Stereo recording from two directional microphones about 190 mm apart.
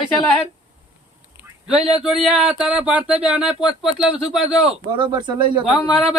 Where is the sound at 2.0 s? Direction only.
5° right (ahead or behind).